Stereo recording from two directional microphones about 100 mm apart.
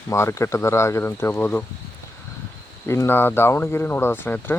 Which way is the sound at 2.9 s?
25° left (ahead or behind).